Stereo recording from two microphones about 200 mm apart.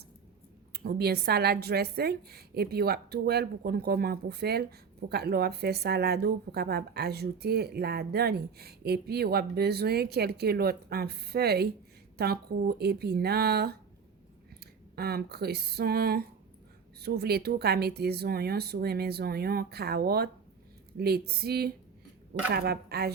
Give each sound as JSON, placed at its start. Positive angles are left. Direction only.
{"t": 0.7, "sound": "a woman's voice", "side_deg": -50}